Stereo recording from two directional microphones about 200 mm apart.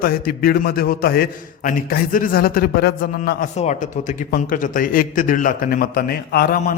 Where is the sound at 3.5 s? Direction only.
35° left (ahead or behind).